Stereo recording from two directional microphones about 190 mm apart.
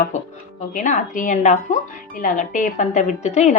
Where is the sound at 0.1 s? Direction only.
40° left (ahead or behind).